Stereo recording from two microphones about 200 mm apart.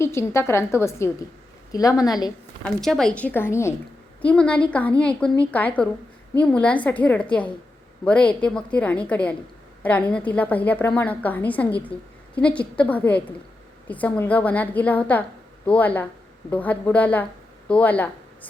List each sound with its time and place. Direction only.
0.0 s a woman's voice: 15° left (ahead or behind)
2.8 s a woman's voice: centre (ahead or behind)